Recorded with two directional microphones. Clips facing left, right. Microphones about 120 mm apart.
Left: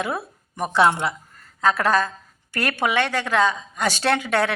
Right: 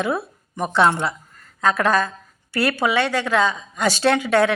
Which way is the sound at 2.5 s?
45° left (ahead or behind).